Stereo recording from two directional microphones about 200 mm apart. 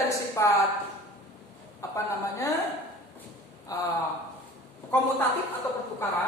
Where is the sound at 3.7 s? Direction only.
15° left (ahead or behind).